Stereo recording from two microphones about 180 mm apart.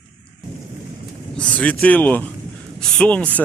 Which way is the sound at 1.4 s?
5° left (ahead or behind).